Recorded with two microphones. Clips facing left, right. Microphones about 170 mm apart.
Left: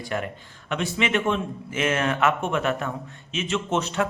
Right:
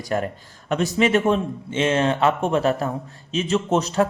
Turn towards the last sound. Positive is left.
turn(degrees=-40)  # may be behind; listen again after turning